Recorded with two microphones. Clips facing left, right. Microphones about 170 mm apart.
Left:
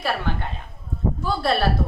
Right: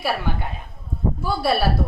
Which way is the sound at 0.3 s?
10° right (ahead or behind).